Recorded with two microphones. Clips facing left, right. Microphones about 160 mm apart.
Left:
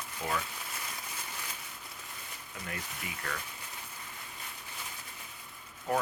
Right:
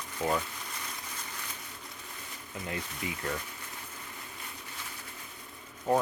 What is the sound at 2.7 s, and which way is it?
Speech, 25° right (ahead or behind).